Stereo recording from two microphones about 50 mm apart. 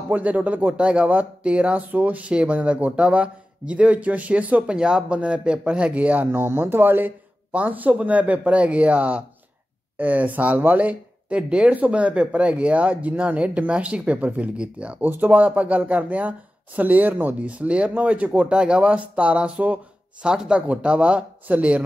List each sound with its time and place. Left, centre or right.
0.1 s speech: right
4.6 s speech: centre
6.3 s speech: right
7.5 s speech: right
15.0 s speech: right
18.5 s speech: right